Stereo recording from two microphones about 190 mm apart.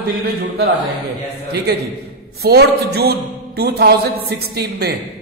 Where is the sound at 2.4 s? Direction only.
55° right (ahead or behind).